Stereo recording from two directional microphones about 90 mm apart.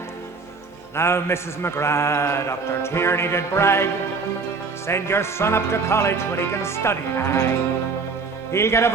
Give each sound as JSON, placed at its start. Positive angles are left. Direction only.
{"t": 0.9, "sound": "a man's voice", "side_deg": 30}
{"t": 4.9, "sound": "a man's voice", "side_deg": 30}
{"t": 8.5, "sound": "a man's voice", "side_deg": 30}